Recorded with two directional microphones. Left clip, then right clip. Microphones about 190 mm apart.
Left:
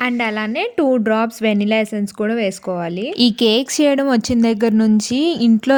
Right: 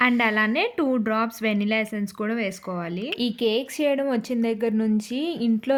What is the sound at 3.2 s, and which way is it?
A woman's voice, 40° left (ahead or behind).